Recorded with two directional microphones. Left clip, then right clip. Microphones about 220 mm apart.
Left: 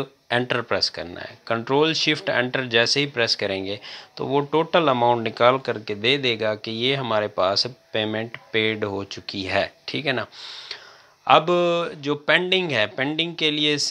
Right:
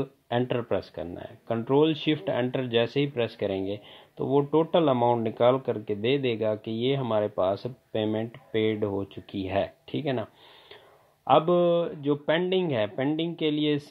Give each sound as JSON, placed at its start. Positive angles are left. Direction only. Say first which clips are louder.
{"t": 0.3, "sound": "speech", "louder": "left 5 dB", "side_deg": 15}
{"t": 11.2, "sound": "speech", "louder": "left 4 dB", "side_deg": 15}